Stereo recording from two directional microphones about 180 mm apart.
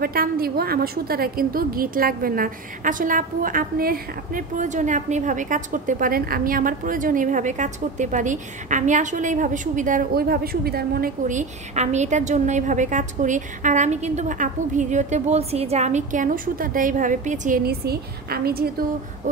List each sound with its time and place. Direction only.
0.0 s a woman's voice: 55° right (ahead or behind)
17.6 s a woman's voice: 60° right (ahead or behind)